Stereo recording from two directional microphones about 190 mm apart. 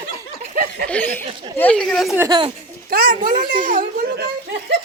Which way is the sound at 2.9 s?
50° right (ahead or behind).